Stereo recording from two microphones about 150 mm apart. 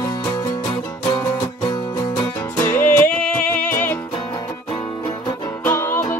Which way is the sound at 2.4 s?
15° left (ahead or behind).